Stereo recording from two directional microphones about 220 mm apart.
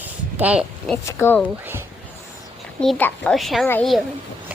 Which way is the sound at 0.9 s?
10° left (ahead or behind).